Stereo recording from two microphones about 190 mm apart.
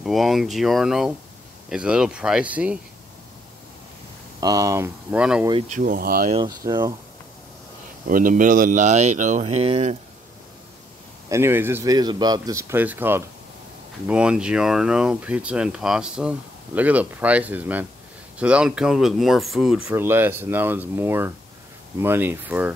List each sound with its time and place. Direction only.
0.0 s speech: centre (ahead or behind)
4.4 s speech: 20° right (ahead or behind)
5.4 s speech: 25° right (ahead or behind)
5.7 s speech: 45° right (ahead or behind)
6.3 s speech: 20° right (ahead or behind)
8.1 s speech: 45° right (ahead or behind)
11.2 s speech: 15° right (ahead or behind)